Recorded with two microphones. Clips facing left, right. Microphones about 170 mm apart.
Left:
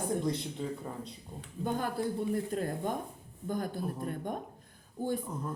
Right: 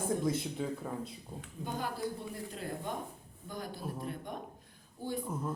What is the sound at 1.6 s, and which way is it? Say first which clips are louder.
Speech: left 5 dB; 50° left (ahead or behind).